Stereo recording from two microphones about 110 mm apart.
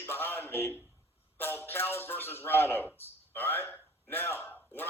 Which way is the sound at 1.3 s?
20° left (ahead or behind).